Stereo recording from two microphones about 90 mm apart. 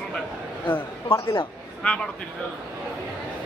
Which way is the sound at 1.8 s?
15° left (ahead or behind).